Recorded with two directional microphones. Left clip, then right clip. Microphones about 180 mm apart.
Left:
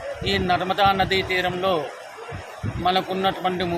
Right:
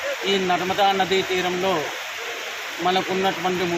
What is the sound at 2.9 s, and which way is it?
Speech, 15° left (ahead or behind).